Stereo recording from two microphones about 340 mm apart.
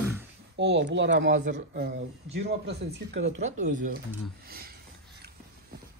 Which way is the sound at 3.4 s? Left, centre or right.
Right.